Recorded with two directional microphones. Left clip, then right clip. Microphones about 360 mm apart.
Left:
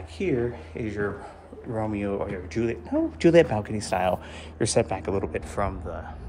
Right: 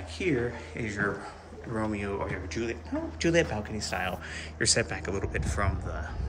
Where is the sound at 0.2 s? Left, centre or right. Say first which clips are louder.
Left 3 dB; centre.